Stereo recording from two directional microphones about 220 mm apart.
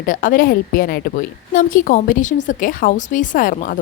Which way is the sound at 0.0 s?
40° left (ahead or behind).